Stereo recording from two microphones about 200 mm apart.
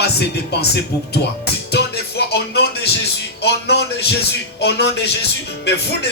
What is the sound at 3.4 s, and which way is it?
Speech, 55° left (ahead or behind).